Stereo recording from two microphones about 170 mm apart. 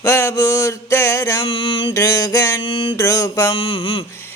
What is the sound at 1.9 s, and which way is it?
Mantra, 20° left (ahead or behind).